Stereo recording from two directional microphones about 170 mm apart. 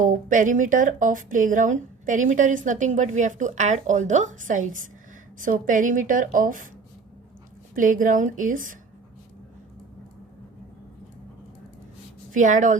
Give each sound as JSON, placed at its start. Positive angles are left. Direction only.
{"t": 0.0, "sound": "speech", "side_deg": -50}
{"t": 7.8, "sound": "speech", "side_deg": -50}
{"t": 12.3, "sound": "speech", "side_deg": -45}